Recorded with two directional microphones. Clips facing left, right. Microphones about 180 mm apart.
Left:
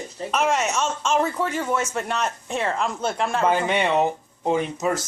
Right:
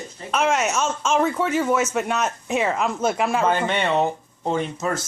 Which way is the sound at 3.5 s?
10° left (ahead or behind).